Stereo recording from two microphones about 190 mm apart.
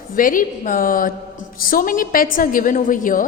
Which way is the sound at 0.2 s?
45° left (ahead or behind).